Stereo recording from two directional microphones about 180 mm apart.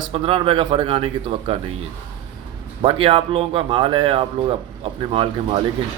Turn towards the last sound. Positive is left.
turn(degrees=-30)  # may be behind; listen again after turning